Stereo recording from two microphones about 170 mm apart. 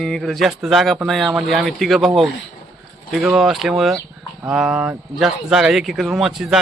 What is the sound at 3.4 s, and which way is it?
Speech, centre (ahead or behind).